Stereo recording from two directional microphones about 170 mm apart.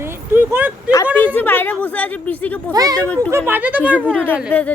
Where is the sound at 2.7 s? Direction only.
20° right (ahead or behind).